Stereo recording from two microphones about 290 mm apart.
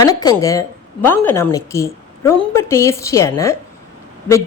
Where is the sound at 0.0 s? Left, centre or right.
Centre.